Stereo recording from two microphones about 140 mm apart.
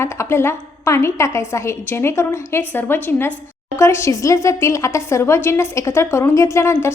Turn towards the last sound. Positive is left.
turn(degrees=20)  # may be behind; listen again after turning